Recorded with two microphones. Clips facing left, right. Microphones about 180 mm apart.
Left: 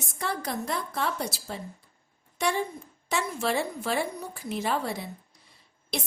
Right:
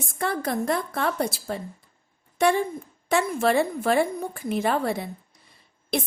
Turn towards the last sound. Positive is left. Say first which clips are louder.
# right 7 dB
turn(degrees=-55)  # may be behind; listen again after turning